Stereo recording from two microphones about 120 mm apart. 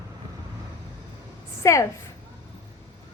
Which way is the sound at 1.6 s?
25° left (ahead or behind).